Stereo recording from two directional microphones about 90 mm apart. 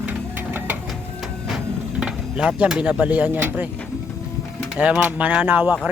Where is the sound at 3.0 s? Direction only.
20° right (ahead or behind).